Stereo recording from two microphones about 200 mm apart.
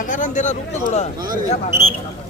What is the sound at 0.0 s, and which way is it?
Speech, 40° left (ahead or behind).